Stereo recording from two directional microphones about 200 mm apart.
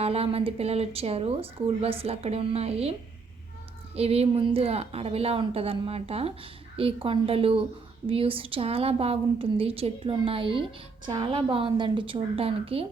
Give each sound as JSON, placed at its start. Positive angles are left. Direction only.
{"t": 0.0, "sound": "a woman's voice", "side_deg": -30}
{"t": 3.9, "sound": "a woman's voice", "side_deg": -30}